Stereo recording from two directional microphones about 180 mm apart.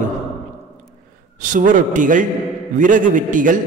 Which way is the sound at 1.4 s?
45° right (ahead or behind).